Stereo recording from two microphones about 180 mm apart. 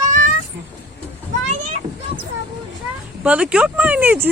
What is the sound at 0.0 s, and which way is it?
Cat, 45° right (ahead or behind).